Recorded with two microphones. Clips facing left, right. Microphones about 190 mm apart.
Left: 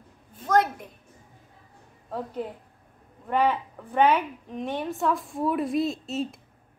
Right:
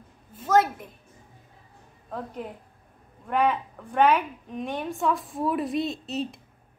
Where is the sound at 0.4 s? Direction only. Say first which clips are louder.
Right 1 dB; 5° right (ahead or behind).